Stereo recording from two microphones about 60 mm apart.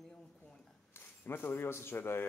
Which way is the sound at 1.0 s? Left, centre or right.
Left.